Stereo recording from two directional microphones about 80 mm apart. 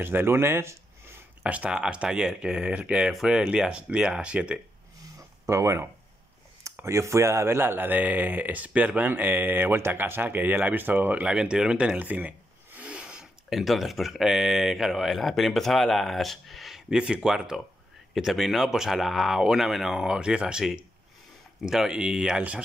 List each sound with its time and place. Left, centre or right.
0.0 s speech: right
1.4 s speech: centre
5.5 s a man's voice: right; by 22.6 s centre